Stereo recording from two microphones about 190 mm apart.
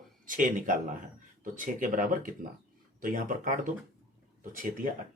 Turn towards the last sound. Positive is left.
turn(degrees=-45)  # may be behind; listen again after turning